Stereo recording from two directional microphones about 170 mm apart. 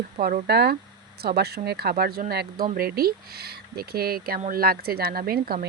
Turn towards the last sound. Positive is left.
turn(degrees=-60)  # may be behind; listen again after turning